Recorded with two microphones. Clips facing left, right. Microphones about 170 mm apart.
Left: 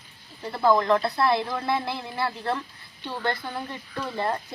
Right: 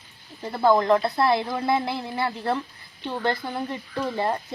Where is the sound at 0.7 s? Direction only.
20° right (ahead or behind).